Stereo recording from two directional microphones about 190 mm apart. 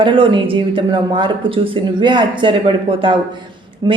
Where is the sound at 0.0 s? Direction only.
25° right (ahead or behind).